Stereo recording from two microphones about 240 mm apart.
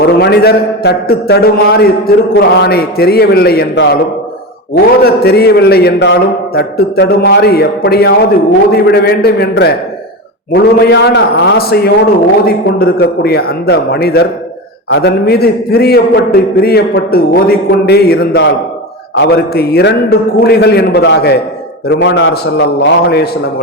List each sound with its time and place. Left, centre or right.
0.0 s a man's voice: left